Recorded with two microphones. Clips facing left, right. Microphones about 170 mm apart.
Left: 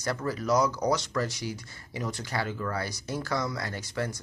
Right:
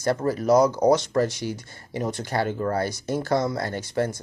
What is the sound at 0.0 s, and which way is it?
Speech, 50° right (ahead or behind).